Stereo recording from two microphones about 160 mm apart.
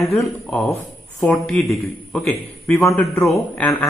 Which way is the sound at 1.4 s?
Centre (ahead or behind).